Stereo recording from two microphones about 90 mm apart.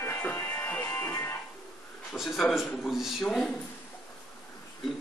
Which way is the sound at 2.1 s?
Centre (ahead or behind).